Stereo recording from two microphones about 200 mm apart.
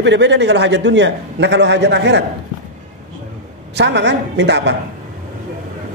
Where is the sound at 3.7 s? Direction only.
60° right (ahead or behind).